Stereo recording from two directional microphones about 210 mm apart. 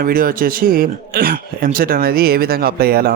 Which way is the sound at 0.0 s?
45° right (ahead or behind).